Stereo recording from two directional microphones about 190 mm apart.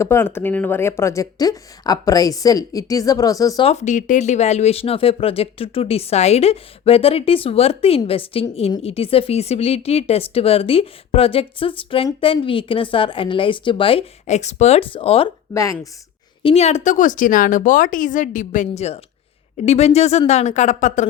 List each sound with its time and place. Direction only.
0.0 s speech: 10° left (ahead or behind)
3.7 s speech: 40° left (ahead or behind)
15.5 s speech: 15° left (ahead or behind)
16.4 s speech: 30° left (ahead or behind)